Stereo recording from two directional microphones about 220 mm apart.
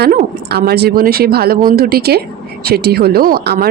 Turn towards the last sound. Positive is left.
turn(degrees=-45)  # may be behind; listen again after turning